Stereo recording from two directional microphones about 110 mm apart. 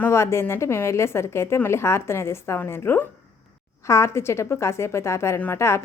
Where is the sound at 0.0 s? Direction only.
25° left (ahead or behind).